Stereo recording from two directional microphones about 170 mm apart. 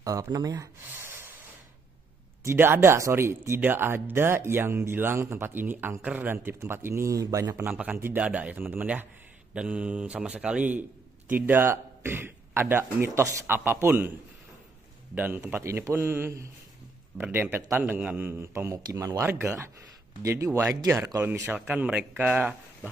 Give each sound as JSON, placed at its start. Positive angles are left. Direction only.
{"t": 0.0, "sound": "speech", "side_deg": -20}
{"t": 2.4, "sound": "a man's voice", "side_deg": -15}
{"t": 15.1, "sound": "speech", "side_deg": -10}